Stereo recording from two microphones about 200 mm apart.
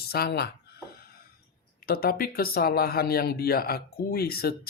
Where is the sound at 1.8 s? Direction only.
50° left (ahead or behind).